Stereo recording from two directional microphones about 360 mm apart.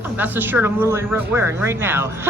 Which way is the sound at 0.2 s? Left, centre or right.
Centre.